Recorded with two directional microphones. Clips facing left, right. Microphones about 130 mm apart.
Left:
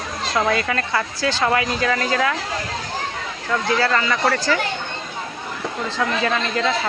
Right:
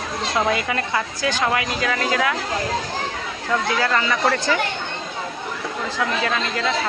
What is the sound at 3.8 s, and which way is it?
Speech, 10° right (ahead or behind).